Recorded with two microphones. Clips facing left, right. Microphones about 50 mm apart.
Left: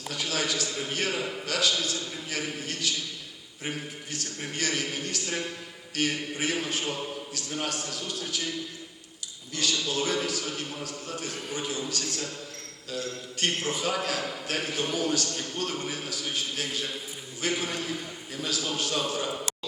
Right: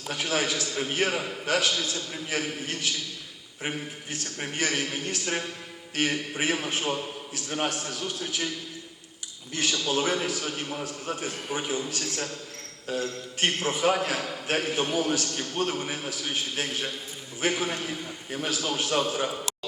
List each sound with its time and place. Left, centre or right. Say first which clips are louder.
0.1 s a man's voice: right 3 dB; right
9.5 s a man's voice: right 2 dB; right
12.9 s a man's voice: right 4 dB; right